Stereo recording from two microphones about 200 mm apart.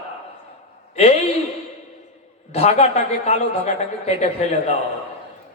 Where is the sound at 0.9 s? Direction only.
30° left (ahead or behind).